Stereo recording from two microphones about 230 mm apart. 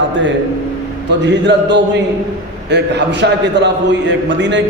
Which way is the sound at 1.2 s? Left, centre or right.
Right.